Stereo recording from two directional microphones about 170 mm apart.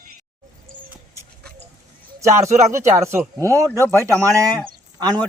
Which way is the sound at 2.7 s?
15° right (ahead or behind).